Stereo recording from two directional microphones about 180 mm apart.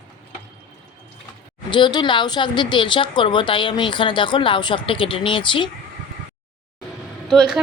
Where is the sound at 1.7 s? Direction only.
25° left (ahead or behind).